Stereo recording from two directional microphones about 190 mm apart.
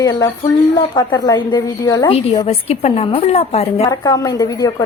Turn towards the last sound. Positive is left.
turn(degrees=20)  # may be behind; listen again after turning